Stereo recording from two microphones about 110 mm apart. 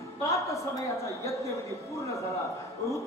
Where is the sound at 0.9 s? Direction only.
30° left (ahead or behind).